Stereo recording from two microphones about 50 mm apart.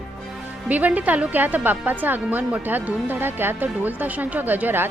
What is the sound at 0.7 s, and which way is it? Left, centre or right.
A woman's voice, right.